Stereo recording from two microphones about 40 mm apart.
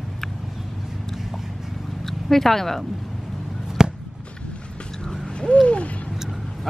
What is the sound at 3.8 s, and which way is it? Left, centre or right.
Basketball bounce, centre.